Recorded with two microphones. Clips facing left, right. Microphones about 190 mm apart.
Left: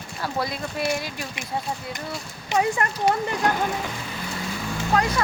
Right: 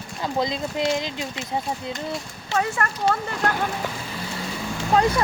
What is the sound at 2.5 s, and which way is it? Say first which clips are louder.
Speech: left 2 dB; 15° left (ahead or behind).